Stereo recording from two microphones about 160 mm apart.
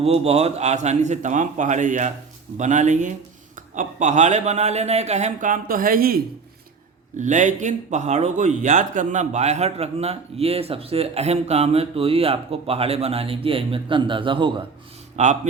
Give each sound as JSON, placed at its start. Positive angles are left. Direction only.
{"t": 0.0, "sound": "speech", "side_deg": -40}
{"t": 7.2, "sound": "speech", "side_deg": -50}
{"t": 15.1, "sound": "speech", "side_deg": -45}